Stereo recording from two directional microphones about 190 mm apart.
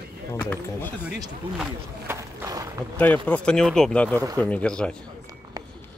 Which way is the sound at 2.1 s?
15° right (ahead or behind).